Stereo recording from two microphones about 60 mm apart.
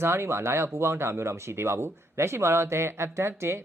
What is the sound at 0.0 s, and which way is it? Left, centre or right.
Speech, right.